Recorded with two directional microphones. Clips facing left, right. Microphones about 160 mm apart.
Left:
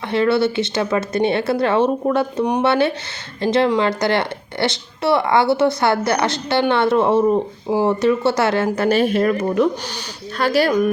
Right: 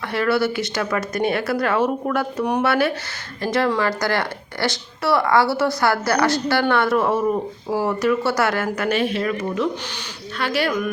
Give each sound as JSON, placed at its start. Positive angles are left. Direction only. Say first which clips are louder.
{"t": 0.1, "sound": "speech", "louder": "left 4 dB", "side_deg": 25}